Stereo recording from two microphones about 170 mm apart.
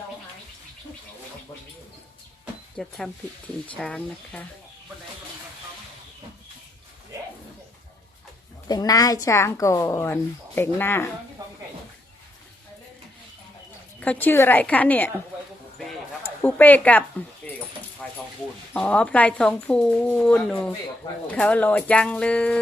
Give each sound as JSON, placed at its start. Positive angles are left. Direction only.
{"t": 2.8, "sound": "a woman's voice", "side_deg": 0}
{"t": 8.6, "sound": "a woman's voice", "side_deg": 20}
{"t": 11.4, "sound": "a sound", "side_deg": -20}
{"t": 14.0, "sound": "a woman's voice", "side_deg": 10}
{"t": 16.2, "sound": "a sound", "side_deg": 10}
{"t": 18.7, "sound": "a woman's voice", "side_deg": 10}